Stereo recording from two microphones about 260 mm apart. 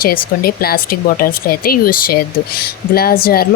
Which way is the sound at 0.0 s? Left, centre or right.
Left.